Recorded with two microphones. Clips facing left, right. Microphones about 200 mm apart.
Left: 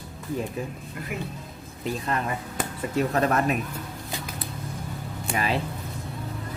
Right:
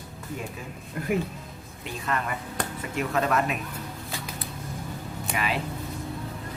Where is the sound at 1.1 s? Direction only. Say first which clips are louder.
Right 8 dB; 50° right (ahead or behind).